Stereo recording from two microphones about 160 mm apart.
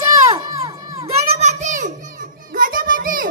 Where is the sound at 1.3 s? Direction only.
45° right (ahead or behind).